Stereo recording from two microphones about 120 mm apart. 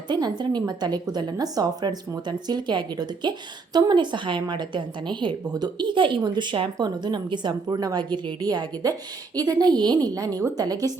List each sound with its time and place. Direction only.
0.1 s speech: 35° right (ahead or behind)